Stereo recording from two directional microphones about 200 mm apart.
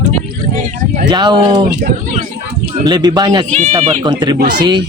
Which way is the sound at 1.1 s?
25° right (ahead or behind).